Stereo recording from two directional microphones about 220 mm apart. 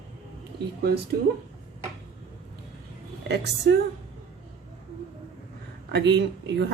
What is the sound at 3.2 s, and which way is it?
Speech, 50° right (ahead or behind).